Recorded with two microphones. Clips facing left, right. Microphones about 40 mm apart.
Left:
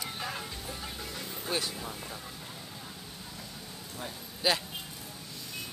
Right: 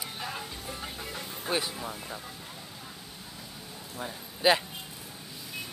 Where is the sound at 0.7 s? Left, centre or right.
Centre.